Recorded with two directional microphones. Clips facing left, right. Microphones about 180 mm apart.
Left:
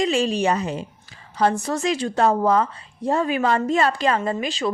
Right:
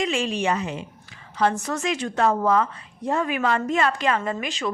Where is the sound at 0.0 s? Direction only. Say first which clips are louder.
Left 4 dB; 35° left (ahead or behind).